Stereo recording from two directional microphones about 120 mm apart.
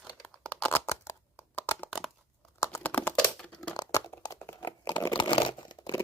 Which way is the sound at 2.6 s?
25° left (ahead or behind).